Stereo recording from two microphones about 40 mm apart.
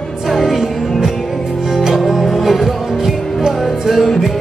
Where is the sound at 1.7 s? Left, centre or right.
Centre.